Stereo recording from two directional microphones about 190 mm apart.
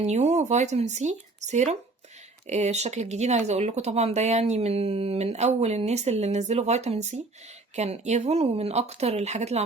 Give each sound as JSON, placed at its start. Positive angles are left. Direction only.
{"t": 0.0, "sound": "speech", "side_deg": -35}